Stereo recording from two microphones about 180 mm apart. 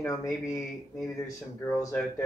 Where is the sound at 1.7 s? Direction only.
15° left (ahead or behind).